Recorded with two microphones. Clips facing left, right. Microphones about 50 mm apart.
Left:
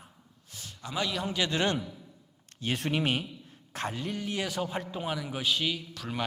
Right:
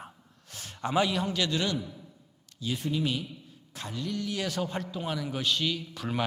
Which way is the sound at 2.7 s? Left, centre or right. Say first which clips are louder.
Left 1 dB; left.